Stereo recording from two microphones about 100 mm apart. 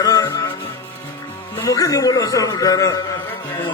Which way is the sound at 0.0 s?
40° left (ahead or behind).